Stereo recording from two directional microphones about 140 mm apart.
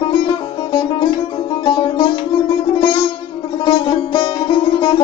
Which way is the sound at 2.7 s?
35° left (ahead or behind).